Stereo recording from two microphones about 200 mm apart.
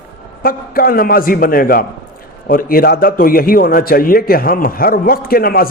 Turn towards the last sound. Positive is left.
turn(degrees=50)  # may be behind; listen again after turning